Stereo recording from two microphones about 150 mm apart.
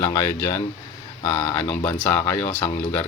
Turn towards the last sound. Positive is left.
turn(degrees=15)  # may be behind; listen again after turning